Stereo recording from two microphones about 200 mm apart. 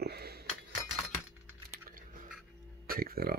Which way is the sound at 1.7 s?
45° right (ahead or behind).